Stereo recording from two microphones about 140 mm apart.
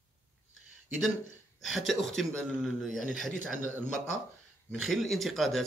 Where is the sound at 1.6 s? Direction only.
Centre (ahead or behind).